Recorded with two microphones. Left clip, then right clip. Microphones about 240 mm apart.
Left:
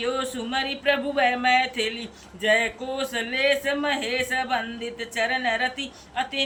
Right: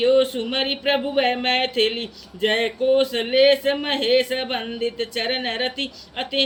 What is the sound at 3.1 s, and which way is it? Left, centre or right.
Speech, centre.